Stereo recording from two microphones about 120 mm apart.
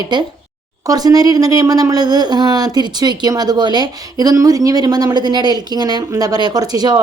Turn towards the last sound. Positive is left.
turn(degrees=-35)  # may be behind; listen again after turning